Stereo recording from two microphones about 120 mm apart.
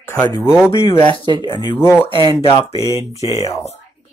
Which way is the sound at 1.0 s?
45° left (ahead or behind).